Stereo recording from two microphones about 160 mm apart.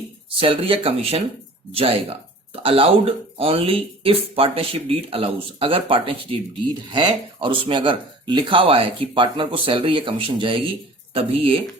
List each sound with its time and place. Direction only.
0.3 s speech: 30° right (ahead or behind)